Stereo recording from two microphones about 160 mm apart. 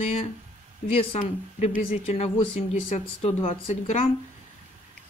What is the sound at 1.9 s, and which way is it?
Speech, 40° left (ahead or behind).